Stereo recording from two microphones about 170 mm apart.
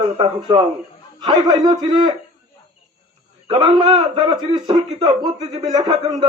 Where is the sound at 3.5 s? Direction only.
30° right (ahead or behind).